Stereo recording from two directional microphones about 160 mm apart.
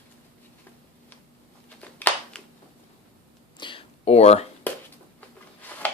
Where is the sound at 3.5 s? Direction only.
30° left (ahead or behind).